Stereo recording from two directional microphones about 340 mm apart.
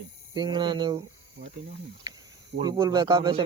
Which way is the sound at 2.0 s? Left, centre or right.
Centre.